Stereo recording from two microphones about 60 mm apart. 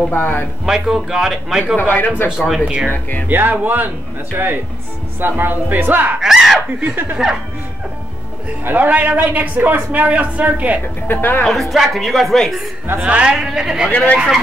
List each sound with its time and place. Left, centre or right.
0.1 s speech: left
0.7 s speech: centre
1.8 s speech: left
2.2 s speech: centre
2.9 s speech: left
3.3 s speech: right
6.2 s a sound: centre
8.6 s a man's voice: right
11.1 s speech: left
11.7 s speech: centre
13.0 s speech: centre
13.8 s speech: left
14.1 s speech: centre